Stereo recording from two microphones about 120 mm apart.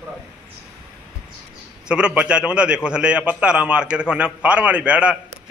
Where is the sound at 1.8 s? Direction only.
5° right (ahead or behind).